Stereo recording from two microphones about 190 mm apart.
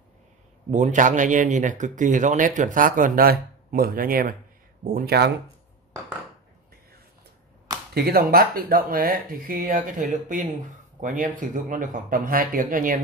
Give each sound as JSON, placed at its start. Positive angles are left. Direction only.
{"t": 0.7, "sound": "speech", "side_deg": -40}
{"t": 7.9, "sound": "speech", "side_deg": -55}